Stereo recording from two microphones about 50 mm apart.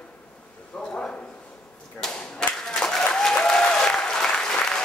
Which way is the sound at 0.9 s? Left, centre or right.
Centre.